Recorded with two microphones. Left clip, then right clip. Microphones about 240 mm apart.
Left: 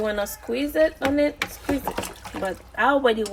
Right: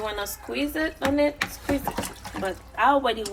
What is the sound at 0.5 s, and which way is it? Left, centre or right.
Speech, left.